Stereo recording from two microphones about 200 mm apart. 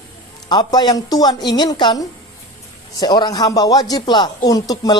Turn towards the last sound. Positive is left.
turn(degrees=20)  # may be behind; listen again after turning